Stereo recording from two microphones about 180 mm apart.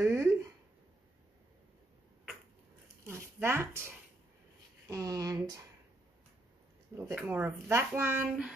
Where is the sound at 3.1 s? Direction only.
15° right (ahead or behind).